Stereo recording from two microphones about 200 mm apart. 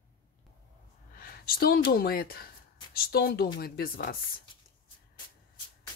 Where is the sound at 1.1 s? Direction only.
45° left (ahead or behind).